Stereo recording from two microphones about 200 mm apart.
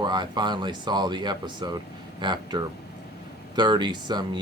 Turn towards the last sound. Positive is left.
turn(degrees=-20)  # may be behind; listen again after turning